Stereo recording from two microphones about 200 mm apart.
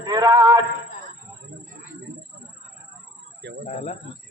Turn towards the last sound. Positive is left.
turn(degrees=-60)  # may be behind; listen again after turning